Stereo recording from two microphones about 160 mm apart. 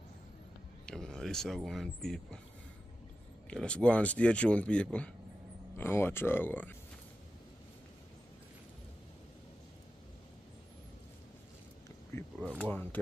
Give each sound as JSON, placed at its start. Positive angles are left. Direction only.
{"t": 0.8, "sound": "speech", "side_deg": 5}
{"t": 3.4, "sound": "speech", "side_deg": 5}
{"t": 12.1, "sound": "a sound", "side_deg": 15}
{"t": 12.5, "sound": "speech", "side_deg": 10}